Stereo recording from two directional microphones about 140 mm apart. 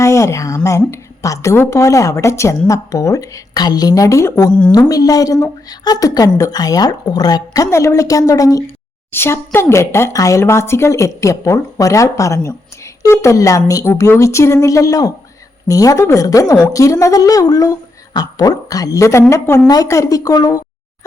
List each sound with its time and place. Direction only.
0.0 s a woman's voice: 20° left (ahead or behind)